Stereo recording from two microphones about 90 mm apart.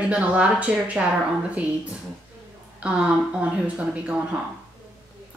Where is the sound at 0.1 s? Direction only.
15° right (ahead or behind).